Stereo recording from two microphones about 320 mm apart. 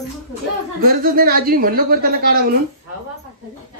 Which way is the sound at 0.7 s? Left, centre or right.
Right.